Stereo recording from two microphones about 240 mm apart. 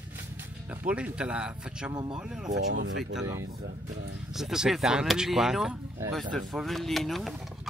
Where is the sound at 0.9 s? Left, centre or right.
Centre.